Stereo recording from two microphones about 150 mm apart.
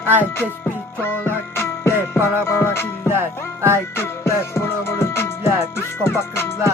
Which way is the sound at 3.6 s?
15° right (ahead or behind).